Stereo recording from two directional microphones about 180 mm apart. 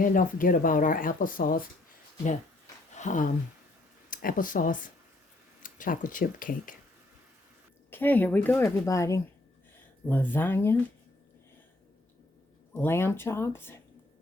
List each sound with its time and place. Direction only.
0.0 s speech: 50° left (ahead or behind)
2.9 s a sound: 40° left (ahead or behind)
4.1 s speech: 50° left (ahead or behind)
7.9 s speech: 10° left (ahead or behind)
12.7 s speech: 15° left (ahead or behind)